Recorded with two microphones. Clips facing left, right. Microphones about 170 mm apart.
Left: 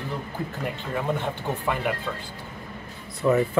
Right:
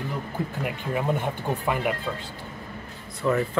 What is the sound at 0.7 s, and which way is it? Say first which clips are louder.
Speech: right 2 dB; 15° right (ahead or behind).